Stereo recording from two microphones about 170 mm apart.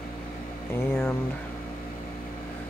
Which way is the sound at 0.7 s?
15° left (ahead or behind).